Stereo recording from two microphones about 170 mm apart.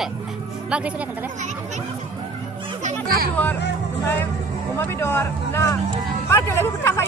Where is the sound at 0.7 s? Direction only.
5° right (ahead or behind).